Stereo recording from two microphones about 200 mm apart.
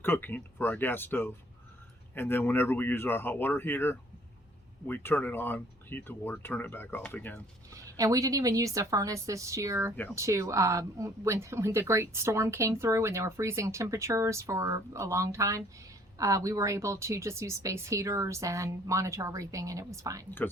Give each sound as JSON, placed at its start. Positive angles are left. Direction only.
{"t": 0.0, "sound": "speech", "side_deg": 10}
{"t": 7.7, "sound": "speech", "side_deg": -15}